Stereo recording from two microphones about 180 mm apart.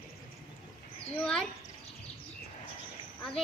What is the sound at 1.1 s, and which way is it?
Speech, 5° left (ahead or behind).